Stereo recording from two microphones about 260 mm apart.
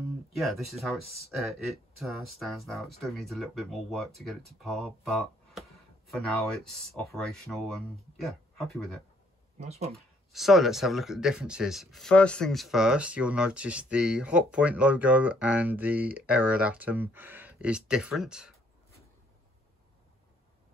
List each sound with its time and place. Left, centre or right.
0.3 s speech: centre
9.6 s speech: right
9.9 s speech: centre